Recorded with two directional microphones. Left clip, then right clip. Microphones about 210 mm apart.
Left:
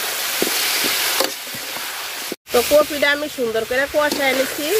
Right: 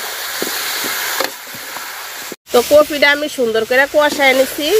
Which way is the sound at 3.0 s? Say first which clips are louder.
Right 5 dB; 45° right (ahead or behind).